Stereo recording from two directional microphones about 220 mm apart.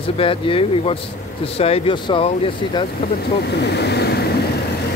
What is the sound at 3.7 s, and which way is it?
Waves, 50° left (ahead or behind).